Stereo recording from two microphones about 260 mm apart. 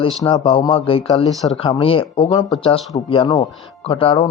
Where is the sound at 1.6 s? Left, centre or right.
Left.